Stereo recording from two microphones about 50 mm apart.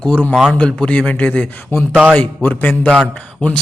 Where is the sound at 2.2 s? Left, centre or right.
Left.